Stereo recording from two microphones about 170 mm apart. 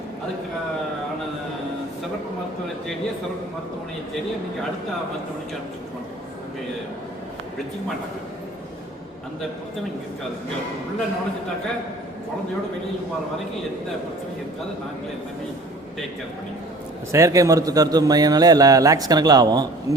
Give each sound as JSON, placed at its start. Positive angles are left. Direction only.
{"t": 17.1, "sound": "a man's voice", "side_deg": -15}